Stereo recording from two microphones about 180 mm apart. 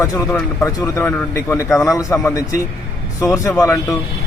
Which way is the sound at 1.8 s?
15° left (ahead or behind).